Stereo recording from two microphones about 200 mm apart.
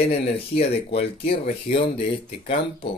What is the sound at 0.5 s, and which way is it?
Speech, 30° left (ahead or behind).